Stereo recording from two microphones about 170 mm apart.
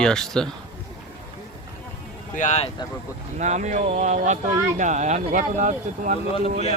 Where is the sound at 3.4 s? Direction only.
45° right (ahead or behind).